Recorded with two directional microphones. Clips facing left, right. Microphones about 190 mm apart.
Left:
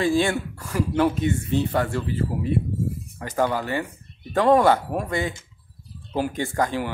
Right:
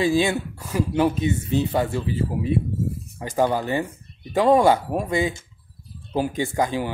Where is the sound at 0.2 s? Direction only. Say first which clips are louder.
Right 1 dB; 20° right (ahead or behind).